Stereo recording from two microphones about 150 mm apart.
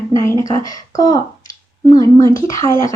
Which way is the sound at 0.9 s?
25° left (ahead or behind).